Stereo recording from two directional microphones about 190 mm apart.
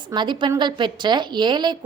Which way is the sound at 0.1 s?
25° right (ahead or behind).